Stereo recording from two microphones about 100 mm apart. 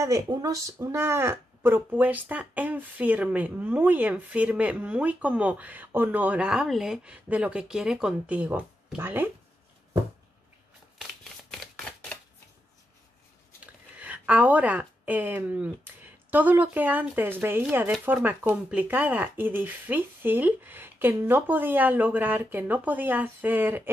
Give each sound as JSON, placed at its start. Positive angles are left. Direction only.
{"t": 0.0, "sound": "speech", "side_deg": -35}
{"t": 11.5, "sound": "camera", "side_deg": 0}
{"t": 13.9, "sound": "a woman's voice", "side_deg": -15}